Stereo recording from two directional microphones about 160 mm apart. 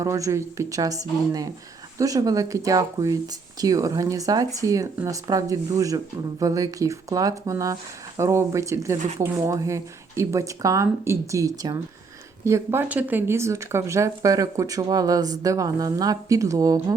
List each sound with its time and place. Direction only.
0.0 s speech: 20° right (ahead or behind)
9.0 s speech: 40° right (ahead or behind)
9.2 s speech: 20° right (ahead or behind)